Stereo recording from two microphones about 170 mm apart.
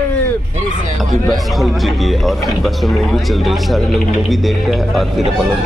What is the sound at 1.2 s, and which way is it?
A man's voice, centre (ahead or behind).